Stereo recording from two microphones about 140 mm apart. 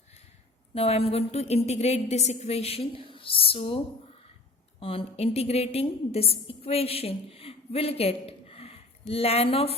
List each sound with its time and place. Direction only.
0.7 s a woman's voice: 45° left (ahead or behind)
4.8 s a woman's voice: 40° left (ahead or behind)